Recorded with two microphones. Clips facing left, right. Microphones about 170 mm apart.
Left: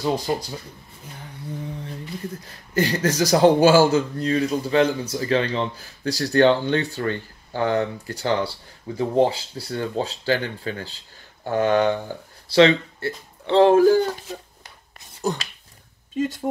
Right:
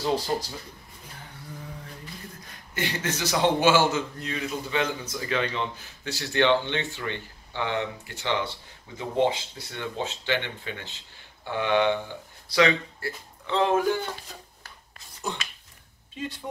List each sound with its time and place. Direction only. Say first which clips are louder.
2.4 s speech: left 9 dB; 35° left (ahead or behind)
12.4 s speech: left 7 dB; 30° left (ahead or behind)
15.3 s speech: left 8 dB; 40° left (ahead or behind)